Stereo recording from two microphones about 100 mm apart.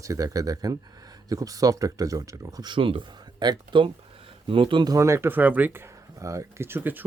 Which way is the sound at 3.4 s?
50° right (ahead or behind).